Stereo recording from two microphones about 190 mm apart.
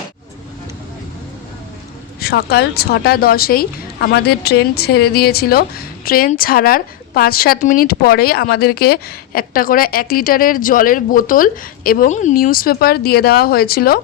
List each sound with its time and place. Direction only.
2.2 s a woman's voice: 55° left (ahead or behind)